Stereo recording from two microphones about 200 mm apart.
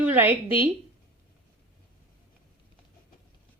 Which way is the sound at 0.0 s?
10° right (ahead or behind).